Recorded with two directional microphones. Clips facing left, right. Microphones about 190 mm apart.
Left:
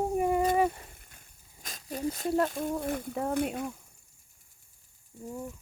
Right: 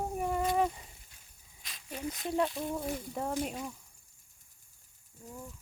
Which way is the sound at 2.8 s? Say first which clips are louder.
Left 4 dB; 55° left (ahead or behind).